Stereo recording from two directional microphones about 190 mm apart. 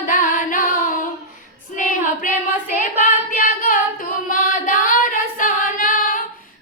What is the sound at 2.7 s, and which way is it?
Child singing, 45° left (ahead or behind).